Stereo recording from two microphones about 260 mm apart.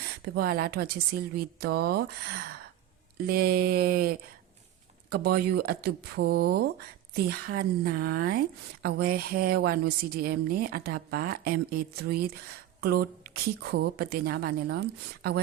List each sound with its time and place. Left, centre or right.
0.3 s a woman's voice: right